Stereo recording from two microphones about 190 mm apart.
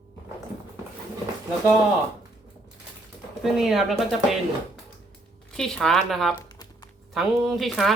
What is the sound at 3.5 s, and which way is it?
Speech, centre (ahead or behind).